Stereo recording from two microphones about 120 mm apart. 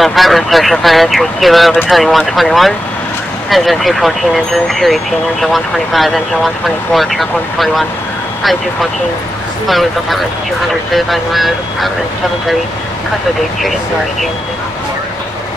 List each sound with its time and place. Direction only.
0.0 s speech: centre (ahead or behind)
9.7 s speech: centre (ahead or behind)